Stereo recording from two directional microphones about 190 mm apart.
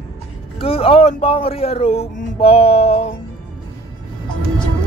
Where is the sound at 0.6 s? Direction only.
30° left (ahead or behind).